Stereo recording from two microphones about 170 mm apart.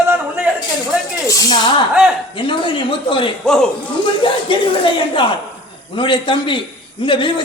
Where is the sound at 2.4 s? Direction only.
30° left (ahead or behind).